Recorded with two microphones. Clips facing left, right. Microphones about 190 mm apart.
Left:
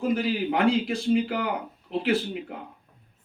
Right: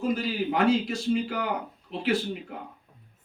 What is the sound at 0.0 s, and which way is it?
A man's voice, 55° left (ahead or behind).